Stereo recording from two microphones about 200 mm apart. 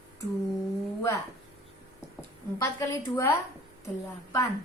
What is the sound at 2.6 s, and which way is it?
Speech, 15° left (ahead or behind).